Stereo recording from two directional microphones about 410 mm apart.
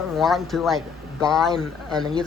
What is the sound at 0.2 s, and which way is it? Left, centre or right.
Speech, centre.